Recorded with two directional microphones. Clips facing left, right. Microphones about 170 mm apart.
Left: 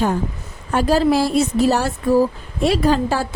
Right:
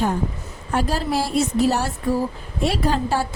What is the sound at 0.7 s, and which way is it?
Speech, 90° left.